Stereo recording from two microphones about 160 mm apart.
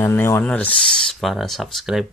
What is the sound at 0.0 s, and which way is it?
Speech, 15° left (ahead or behind).